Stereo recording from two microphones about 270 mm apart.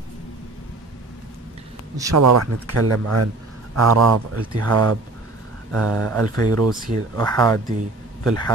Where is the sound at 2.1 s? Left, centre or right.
Right.